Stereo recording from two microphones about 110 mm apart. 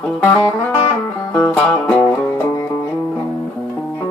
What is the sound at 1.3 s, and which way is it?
Music, 20° left (ahead or behind).